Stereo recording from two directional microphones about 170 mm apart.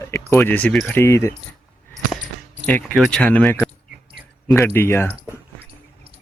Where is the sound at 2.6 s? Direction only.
5° left (ahead or behind).